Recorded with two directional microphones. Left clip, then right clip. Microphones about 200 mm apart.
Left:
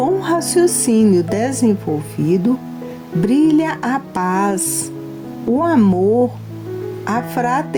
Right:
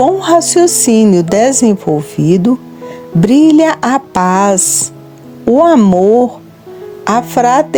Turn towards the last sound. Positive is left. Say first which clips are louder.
# right 9 dB
turn(degrees=-45)  # may be behind; listen again after turning